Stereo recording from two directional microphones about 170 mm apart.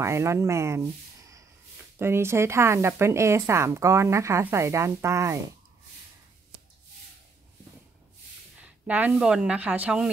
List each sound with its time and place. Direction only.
0.0 s speech: 15° right (ahead or behind)
8.8 s speech: 10° right (ahead or behind)